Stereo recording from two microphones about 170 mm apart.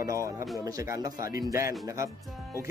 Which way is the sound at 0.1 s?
20° right (ahead or behind).